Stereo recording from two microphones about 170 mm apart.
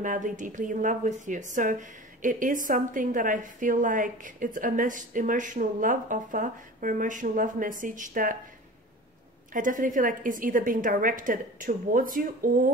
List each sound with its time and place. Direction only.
0.0 s speech: 50° right (ahead or behind)
9.5 s speech: 50° right (ahead or behind)